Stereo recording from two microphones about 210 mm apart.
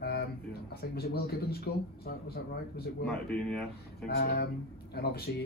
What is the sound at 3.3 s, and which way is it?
Speech, 5° left (ahead or behind).